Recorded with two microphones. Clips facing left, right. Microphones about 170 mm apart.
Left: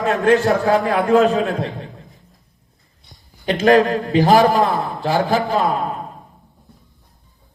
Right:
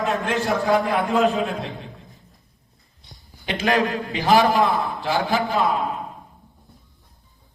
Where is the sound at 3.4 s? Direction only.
40° left (ahead or behind).